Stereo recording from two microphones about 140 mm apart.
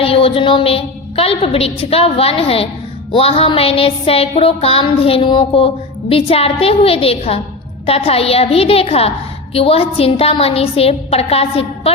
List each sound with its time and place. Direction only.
0.0 s music: 40° left (ahead or behind)